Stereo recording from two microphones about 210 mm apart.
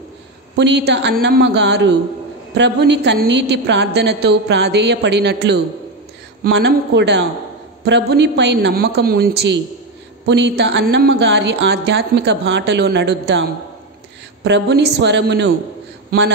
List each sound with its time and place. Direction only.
0.6 s a woman's voice: 55° right (ahead or behind)
14.4 s a woman's voice: 55° right (ahead or behind)